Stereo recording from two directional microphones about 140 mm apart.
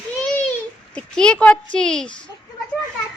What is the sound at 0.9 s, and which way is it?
Speech, 5° left (ahead or behind).